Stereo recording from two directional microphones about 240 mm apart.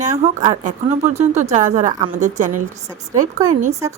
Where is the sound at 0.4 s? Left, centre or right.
Right.